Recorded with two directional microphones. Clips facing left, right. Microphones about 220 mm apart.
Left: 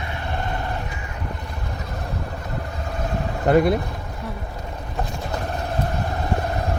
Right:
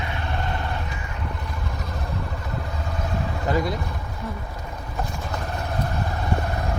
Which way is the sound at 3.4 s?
60° left (ahead or behind).